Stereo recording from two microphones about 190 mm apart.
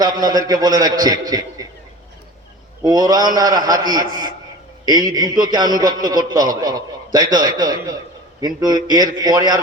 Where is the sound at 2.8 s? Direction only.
20° right (ahead or behind).